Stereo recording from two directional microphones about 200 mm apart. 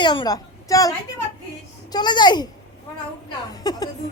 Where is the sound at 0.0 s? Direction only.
20° left (ahead or behind).